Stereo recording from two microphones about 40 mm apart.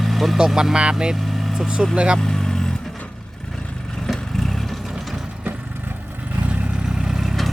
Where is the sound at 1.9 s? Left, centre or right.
Right.